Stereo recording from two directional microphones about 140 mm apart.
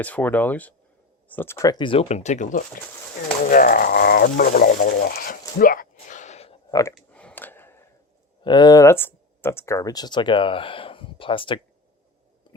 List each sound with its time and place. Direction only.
0.0 s speech: 10° left (ahead or behind); by 2.8 s 70° left (ahead or behind)
3.4 s speech: 85° left; by 6.6 s 50° left (ahead or behind)
6.7 s speech: 25° left (ahead or behind)
6.9 s a sound: 10° left (ahead or behind)
8.4 s speech: 30° left (ahead or behind)